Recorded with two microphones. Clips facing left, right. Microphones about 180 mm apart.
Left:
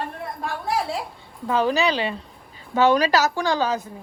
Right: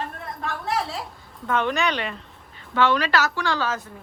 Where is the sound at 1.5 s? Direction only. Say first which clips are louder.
Left 3 dB; 35° left (ahead or behind).